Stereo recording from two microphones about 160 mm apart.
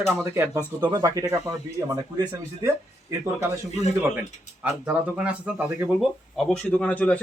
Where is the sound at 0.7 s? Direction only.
25° right (ahead or behind).